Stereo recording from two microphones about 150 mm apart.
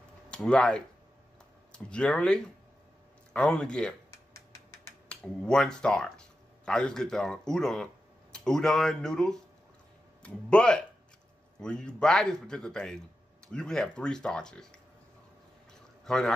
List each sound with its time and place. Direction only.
0.3 s speech: 5° left (ahead or behind)
5.0 s speech: 5° left (ahead or behind)
16.1 s speech: 5° left (ahead or behind)